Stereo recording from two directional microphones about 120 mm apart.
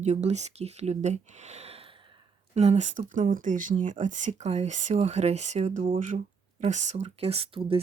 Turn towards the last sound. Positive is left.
turn(degrees=-50)  # may be behind; listen again after turning